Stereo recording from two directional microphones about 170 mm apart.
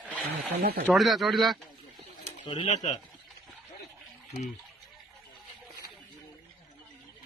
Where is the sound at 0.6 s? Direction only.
60° right (ahead or behind).